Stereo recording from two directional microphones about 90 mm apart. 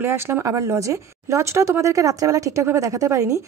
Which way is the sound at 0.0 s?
25° right (ahead or behind).